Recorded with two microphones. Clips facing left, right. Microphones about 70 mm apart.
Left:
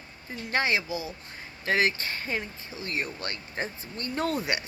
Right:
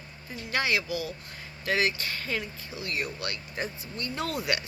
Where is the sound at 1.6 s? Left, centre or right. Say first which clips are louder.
Left 2 dB; left.